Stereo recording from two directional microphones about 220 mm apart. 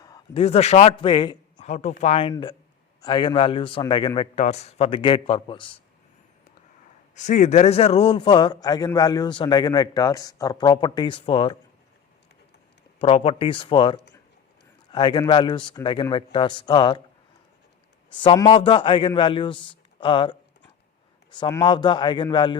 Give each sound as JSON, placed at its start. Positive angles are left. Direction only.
{"t": 0.0, "sound": "a man's voice", "side_deg": 20}
{"t": 1.6, "sound": "a man's voice", "side_deg": 30}
{"t": 7.2, "sound": "a man's voice", "side_deg": 35}
{"t": 13.0, "sound": "a man's voice", "side_deg": 25}
{"t": 18.1, "sound": "a man's voice", "side_deg": 20}